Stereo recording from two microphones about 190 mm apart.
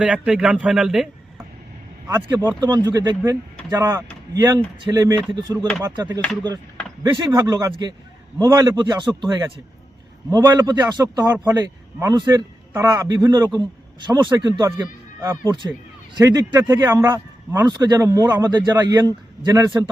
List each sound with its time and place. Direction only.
0.0 s speech: 5° right (ahead or behind)
2.0 s speech: 15° right (ahead or behind)
5.5 s speech: 5° left (ahead or behind)
5.8 s speech: 20° right (ahead or behind)